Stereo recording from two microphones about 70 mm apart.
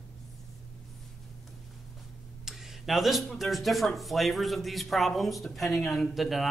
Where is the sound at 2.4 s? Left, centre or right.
Centre.